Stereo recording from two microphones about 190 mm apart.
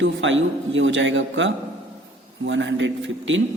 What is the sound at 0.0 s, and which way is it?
A man's voice, 85° right.